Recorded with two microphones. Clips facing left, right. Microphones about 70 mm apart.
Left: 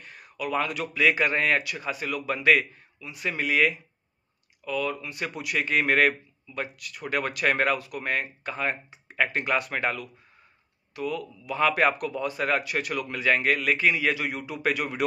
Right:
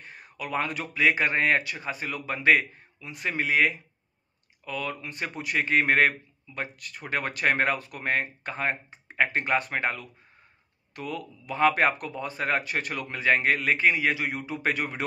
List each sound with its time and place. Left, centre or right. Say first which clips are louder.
0.0 s speech: left 4 dB; right
3.0 s speech: even; right
3.3 s speech: even; right
4.6 s speech: left 4 dB; right
11.0 s speech: left 4 dB; right